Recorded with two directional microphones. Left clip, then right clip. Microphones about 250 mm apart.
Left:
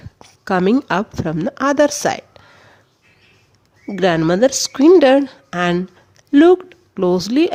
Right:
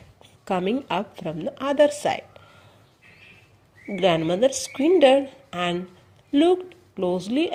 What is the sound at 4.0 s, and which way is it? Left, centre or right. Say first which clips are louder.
A woman's voice: left 6 dB; left.